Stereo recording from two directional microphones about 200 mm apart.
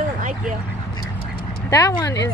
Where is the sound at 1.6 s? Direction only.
15° left (ahead or behind).